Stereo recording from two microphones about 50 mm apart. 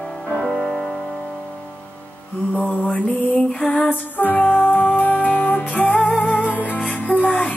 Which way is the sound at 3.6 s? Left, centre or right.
Left.